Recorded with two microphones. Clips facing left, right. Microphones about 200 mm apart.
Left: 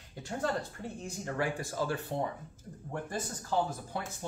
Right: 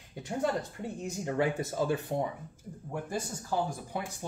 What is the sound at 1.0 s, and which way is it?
Speech, 20° right (ahead or behind).